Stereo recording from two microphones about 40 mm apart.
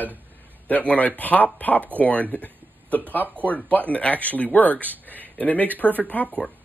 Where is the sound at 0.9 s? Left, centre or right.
Left.